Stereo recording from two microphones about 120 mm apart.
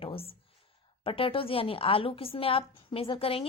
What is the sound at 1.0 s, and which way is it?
A woman's voice, 50° left (ahead or behind).